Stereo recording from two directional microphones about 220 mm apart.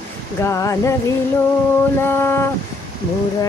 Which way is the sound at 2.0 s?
10° left (ahead or behind).